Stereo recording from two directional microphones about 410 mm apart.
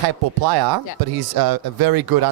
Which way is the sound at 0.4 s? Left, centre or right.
Right.